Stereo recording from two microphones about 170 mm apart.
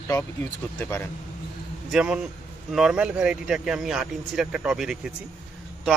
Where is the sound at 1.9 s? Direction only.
5° right (ahead or behind).